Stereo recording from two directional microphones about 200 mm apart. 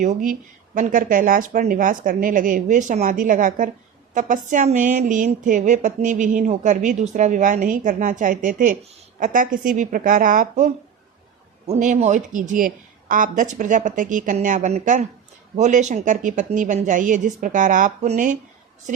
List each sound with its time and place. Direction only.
0.0 s speech: 40° right (ahead or behind)